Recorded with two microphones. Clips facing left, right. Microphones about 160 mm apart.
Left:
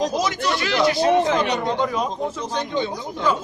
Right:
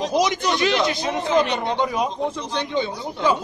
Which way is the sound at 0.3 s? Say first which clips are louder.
Right 2 dB; 20° right (ahead or behind).